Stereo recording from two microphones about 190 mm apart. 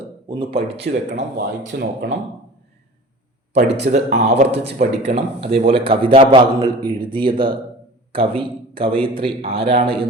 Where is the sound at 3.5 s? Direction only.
35° right (ahead or behind).